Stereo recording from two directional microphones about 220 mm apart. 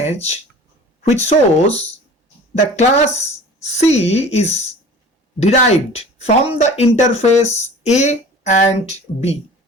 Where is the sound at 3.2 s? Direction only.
30° left (ahead or behind).